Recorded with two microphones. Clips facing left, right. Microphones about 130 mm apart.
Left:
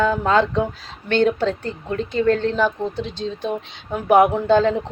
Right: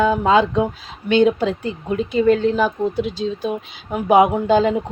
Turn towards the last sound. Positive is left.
turn(degrees=-10)  # may be behind; listen again after turning